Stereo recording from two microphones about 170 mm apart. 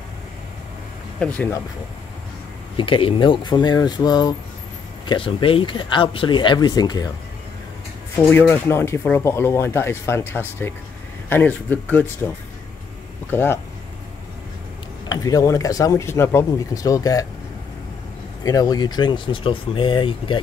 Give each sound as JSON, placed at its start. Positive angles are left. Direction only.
{"t": 1.2, "sound": "speech", "side_deg": 10}
{"t": 2.8, "sound": "speech", "side_deg": 30}
{"t": 8.2, "sound": "speech", "side_deg": 10}
{"t": 13.3, "sound": "speech", "side_deg": 15}
{"t": 15.0, "sound": "speech", "side_deg": 20}
{"t": 18.4, "sound": "speech", "side_deg": 20}